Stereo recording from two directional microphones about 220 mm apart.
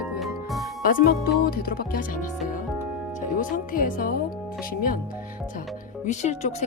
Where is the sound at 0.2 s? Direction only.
Centre (ahead or behind).